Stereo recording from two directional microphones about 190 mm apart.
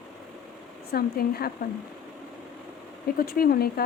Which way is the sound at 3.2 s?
50° left (ahead or behind).